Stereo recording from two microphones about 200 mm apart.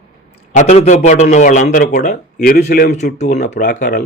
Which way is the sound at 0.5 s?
35° left (ahead or behind).